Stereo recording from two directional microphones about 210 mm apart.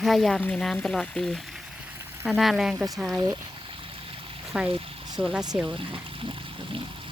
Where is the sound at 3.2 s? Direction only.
20° right (ahead or behind).